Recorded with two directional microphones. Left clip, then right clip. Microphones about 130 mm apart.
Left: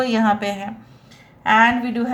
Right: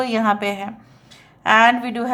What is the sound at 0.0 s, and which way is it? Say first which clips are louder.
Speech: even; 35° right (ahead or behind).